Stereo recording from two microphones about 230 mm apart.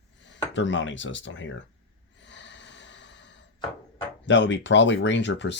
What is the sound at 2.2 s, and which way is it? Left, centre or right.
Snort, left.